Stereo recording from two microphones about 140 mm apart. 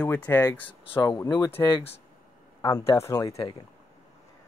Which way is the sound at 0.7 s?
35° left (ahead or behind).